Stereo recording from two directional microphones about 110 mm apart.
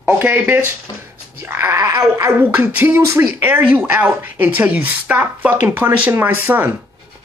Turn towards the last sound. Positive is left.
turn(degrees=-15)  # may be behind; listen again after turning